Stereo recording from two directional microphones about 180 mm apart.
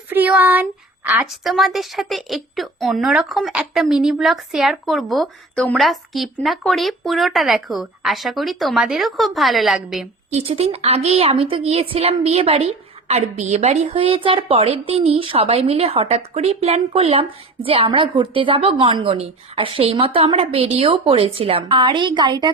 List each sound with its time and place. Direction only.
0.1 s speech: 10° right (ahead or behind)
10.3 s a woman's voice: 35° right (ahead or behind)